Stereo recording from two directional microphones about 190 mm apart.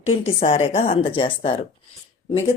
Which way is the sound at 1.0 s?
25° left (ahead or behind).